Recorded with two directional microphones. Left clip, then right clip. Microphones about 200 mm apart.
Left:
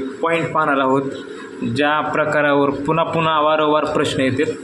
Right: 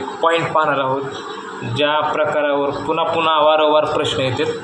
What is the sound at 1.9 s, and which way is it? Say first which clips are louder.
A man's voice: even; 55° left (ahead or behind).